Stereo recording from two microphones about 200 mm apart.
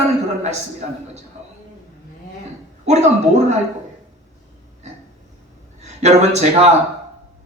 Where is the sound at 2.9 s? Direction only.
35° right (ahead or behind).